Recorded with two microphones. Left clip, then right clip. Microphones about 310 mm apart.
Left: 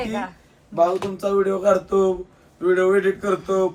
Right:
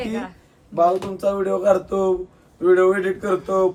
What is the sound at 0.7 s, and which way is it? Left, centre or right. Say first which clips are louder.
Speech: right 1 dB; centre.